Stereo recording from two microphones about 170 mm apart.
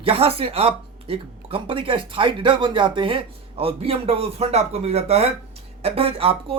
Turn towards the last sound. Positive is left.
turn(degrees=-35)  # may be behind; listen again after turning